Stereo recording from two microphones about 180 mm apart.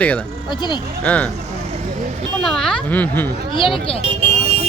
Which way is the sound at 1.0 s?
5° left (ahead or behind).